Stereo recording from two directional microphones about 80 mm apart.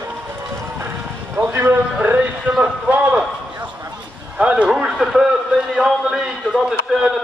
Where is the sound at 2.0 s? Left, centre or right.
Centre.